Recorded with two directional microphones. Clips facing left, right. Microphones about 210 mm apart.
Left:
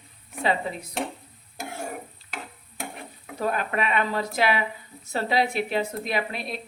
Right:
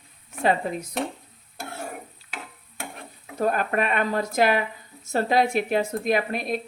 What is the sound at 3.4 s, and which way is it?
Speech, 45° right (ahead or behind).